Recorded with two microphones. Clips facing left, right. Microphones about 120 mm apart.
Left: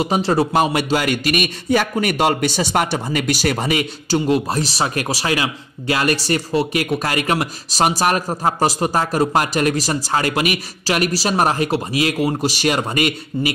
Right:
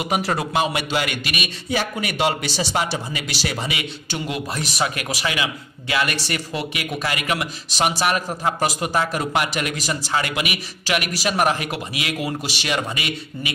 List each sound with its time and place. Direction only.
0.0 s a man's voice: 30° left (ahead or behind)